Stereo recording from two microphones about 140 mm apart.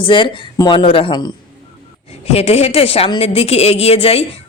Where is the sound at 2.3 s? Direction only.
45° left (ahead or behind).